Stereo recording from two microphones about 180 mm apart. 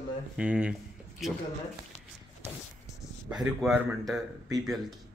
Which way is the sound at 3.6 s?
5° right (ahead or behind).